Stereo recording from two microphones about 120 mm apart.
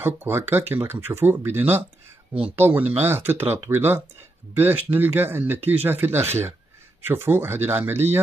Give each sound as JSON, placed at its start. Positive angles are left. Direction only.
{"t": 0.0, "sound": "speech", "side_deg": -15}